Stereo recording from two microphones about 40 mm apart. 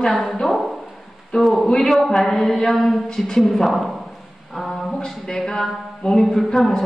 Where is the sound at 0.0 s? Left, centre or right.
Centre.